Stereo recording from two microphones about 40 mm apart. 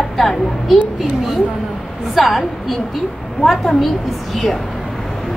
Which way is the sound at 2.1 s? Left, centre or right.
Centre.